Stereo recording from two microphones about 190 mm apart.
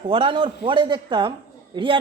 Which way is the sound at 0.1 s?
25° right (ahead or behind).